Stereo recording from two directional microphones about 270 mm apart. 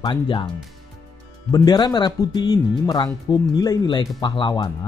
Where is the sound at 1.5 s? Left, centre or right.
Centre.